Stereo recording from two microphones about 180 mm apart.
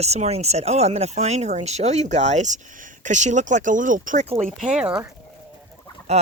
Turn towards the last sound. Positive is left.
turn(degrees=-35)  # may be behind; listen again after turning